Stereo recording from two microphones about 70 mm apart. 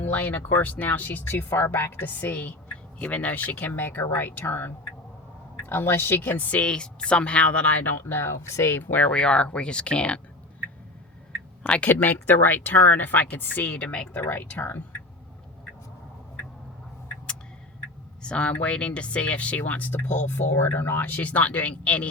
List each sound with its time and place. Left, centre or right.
0.0 s speech: left
6.3 s speech: left
7.9 s speech: left
8.8 s speech: left
11.6 s speech: centre
14.2 s speech: left
18.2 s speech: centre